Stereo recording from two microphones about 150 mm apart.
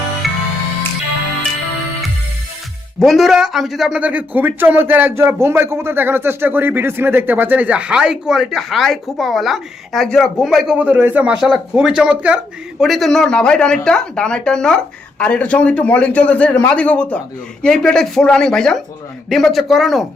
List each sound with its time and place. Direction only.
0.2 s music: centre (ahead or behind)
3.0 s a man's voice: centre (ahead or behind)